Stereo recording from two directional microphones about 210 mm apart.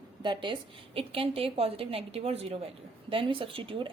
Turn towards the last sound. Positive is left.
turn(degrees=-25)  # may be behind; listen again after turning